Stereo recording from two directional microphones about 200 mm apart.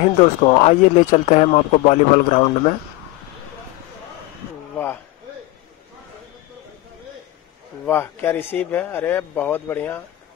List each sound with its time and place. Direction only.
0.0 s speech: 35° left (ahead or behind)
7.8 s speech: 10° left (ahead or behind)